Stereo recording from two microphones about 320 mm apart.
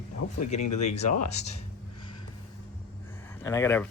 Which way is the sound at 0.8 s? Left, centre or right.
Left.